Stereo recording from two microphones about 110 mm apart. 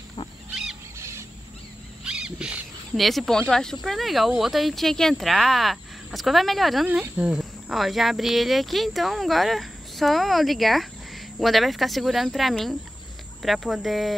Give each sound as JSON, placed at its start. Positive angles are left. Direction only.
{"t": 0.9, "sound": "a sound", "side_deg": -25}
{"t": 2.0, "sound": "speech", "side_deg": -5}
{"t": 6.9, "sound": "speech", "side_deg": -10}